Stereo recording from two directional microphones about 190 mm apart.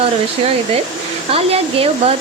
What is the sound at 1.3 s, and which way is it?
Speech, 30° right (ahead or behind).